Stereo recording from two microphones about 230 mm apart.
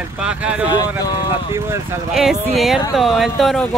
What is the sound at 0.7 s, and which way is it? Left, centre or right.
Speech, centre.